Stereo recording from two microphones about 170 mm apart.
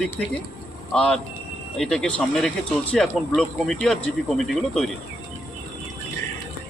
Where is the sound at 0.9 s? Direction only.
5° left (ahead or behind).